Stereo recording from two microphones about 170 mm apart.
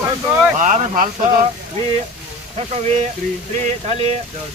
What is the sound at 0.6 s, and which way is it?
Speech, 45° right (ahead or behind).